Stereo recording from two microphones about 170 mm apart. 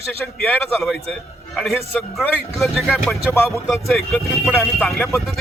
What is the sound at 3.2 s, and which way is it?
Speech, 15° left (ahead or behind).